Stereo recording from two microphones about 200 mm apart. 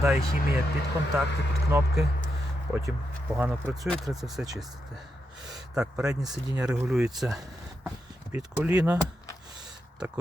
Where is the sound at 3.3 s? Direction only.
10° right (ahead or behind).